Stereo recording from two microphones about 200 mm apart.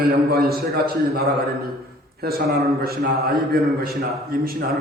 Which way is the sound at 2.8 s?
50° right (ahead or behind).